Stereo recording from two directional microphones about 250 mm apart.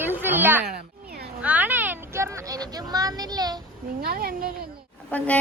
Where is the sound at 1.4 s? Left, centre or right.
Centre.